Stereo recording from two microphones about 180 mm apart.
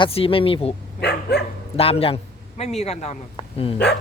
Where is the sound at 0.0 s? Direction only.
30° left (ahead or behind).